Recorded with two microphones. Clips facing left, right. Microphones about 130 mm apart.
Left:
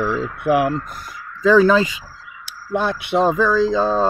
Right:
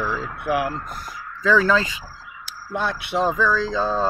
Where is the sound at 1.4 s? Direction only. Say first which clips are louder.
Left 6 dB; 15° left (ahead or behind).